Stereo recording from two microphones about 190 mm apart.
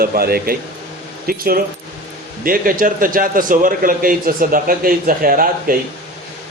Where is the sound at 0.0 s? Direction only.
50° right (ahead or behind).